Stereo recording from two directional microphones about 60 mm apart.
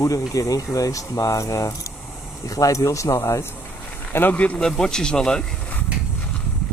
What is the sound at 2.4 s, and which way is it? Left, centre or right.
Speech, left.